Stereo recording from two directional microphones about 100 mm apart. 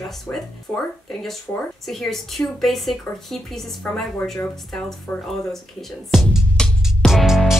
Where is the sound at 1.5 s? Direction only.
20° left (ahead or behind).